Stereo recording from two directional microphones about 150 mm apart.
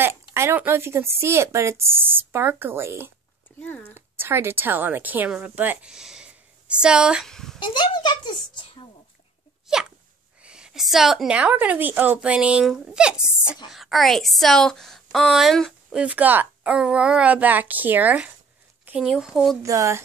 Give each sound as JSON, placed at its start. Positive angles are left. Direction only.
{"t": 0.0, "sound": "speech", "side_deg": -15}
{"t": 3.5, "sound": "speech", "side_deg": 10}
{"t": 3.9, "sound": "a woman's voice", "side_deg": -15}
{"t": 7.6, "sound": "a child's voice", "side_deg": 30}
{"t": 9.7, "sound": "sneeze", "side_deg": -5}
{"t": 10.4, "sound": "a woman's voice", "side_deg": -5}
{"t": 16.0, "sound": "a woman's voice", "side_deg": -10}
{"t": 19.6, "sound": "speech", "side_deg": -20}